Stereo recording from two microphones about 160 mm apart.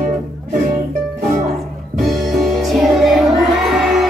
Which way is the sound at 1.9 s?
Centre (ahead or behind).